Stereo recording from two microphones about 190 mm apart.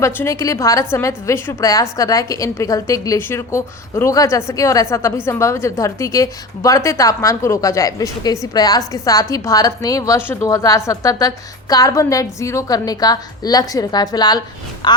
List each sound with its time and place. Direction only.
0.0 s a woman's voice: 15° left (ahead or behind)